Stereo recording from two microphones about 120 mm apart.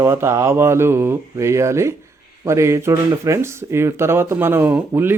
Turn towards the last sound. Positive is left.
turn(degrees=-20)  # may be behind; listen again after turning